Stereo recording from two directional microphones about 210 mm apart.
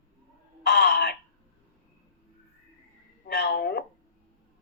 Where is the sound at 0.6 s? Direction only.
55° left (ahead or behind).